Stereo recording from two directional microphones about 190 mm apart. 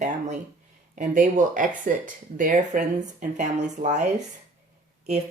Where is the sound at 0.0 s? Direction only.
40° right (ahead or behind).